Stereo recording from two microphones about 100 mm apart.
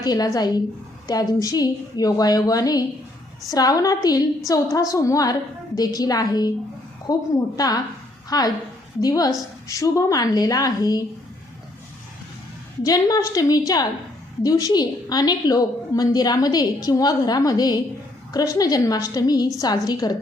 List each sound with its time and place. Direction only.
0.0 s a woman's voice: 40° left (ahead or behind)
12.8 s a woman's voice: 40° left (ahead or behind)